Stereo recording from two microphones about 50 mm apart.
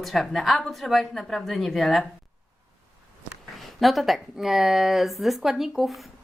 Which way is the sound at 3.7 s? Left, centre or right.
Centre.